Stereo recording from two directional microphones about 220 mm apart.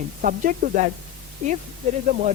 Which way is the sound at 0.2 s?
40° right (ahead or behind).